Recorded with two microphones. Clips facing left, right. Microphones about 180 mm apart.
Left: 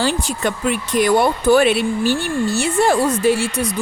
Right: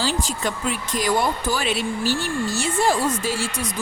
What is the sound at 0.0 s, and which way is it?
Speech, 60° left (ahead or behind).